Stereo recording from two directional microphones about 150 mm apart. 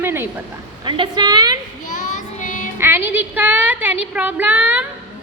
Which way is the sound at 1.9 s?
60° left (ahead or behind).